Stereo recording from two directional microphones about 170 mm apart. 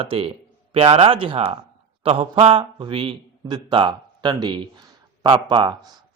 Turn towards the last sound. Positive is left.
turn(degrees=-25)  # may be behind; listen again after turning